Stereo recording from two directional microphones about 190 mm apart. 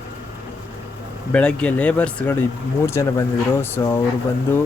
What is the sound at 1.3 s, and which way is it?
Speech, 5° left (ahead or behind).